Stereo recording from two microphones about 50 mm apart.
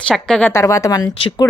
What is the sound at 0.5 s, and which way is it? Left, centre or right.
Speech, left.